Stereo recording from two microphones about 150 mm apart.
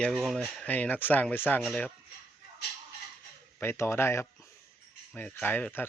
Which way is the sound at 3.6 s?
15° left (ahead or behind).